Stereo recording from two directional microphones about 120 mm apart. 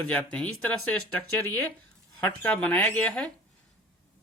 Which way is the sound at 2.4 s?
10° left (ahead or behind).